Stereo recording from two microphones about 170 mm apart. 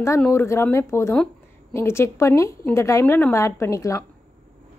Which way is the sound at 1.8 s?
15° left (ahead or behind).